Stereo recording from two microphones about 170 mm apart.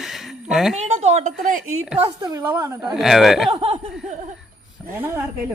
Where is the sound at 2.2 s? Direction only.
15° right (ahead or behind).